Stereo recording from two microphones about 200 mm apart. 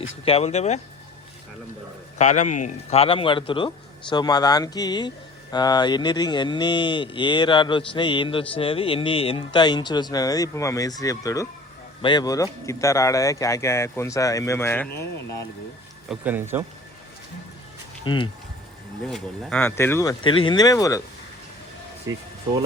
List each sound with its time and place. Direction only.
0.3 s speech: 30° left (ahead or behind)
2.1 s speech: 35° left (ahead or behind); by 14.8 s 10° left (ahead or behind)
16.0 s speech: 10° right (ahead or behind)
18.0 s speech: 25° left (ahead or behind)
19.0 s speech: centre (ahead or behind); by 21.0 s 15° left (ahead or behind)